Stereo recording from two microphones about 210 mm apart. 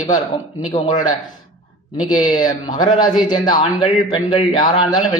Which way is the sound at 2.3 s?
20° left (ahead or behind).